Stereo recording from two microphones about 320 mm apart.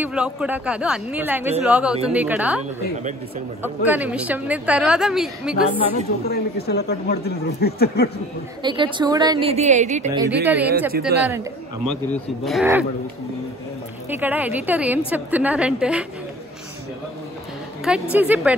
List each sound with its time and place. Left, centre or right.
0.0 s a woman's voice: centre
3.6 s a woman's voice: centre
6.2 s speech: left
8.6 s a woman's voice: centre
10.4 s a woman's voice: centre
10.9 s speech: right
11.2 s a woman's voice: centre
14.0 s a woman's voice: centre
17.8 s a woman's voice: centre